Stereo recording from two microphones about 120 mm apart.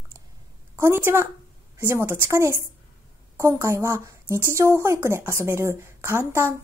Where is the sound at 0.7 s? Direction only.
20° right (ahead or behind).